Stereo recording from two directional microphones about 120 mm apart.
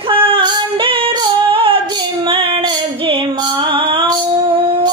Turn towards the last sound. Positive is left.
turn(degrees=-45)  # may be behind; listen again after turning